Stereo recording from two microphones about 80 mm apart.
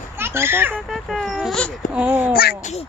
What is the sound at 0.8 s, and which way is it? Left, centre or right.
Speech, centre.